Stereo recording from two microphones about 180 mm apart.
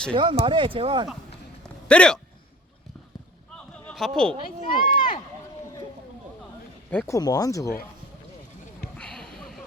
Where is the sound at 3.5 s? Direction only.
5° left (ahead or behind).